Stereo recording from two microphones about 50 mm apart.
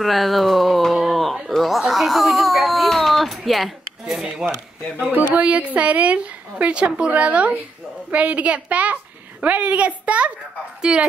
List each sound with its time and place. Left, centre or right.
0.0 s speech: centre
0.9 s a sound: centre
1.5 s baby cry: centre
4.1 s speech: centre
5.3 s a woman's voice: right